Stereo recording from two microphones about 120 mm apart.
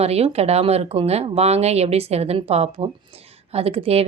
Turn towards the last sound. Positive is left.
turn(degrees=-55)  # may be behind; listen again after turning